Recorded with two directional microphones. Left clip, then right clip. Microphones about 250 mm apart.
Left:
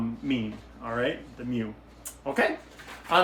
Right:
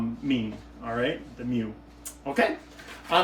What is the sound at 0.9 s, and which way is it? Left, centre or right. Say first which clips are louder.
Mantra: even; centre.